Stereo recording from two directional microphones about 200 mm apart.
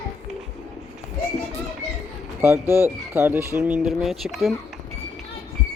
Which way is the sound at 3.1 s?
10° right (ahead or behind).